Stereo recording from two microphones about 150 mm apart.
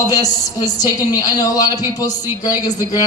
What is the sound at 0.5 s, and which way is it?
A man's voice, 25° left (ahead or behind).